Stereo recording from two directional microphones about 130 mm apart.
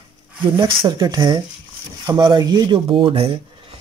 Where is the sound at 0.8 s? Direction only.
30° right (ahead or behind).